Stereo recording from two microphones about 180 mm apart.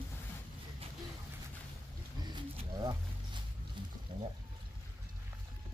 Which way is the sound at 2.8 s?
20° right (ahead or behind).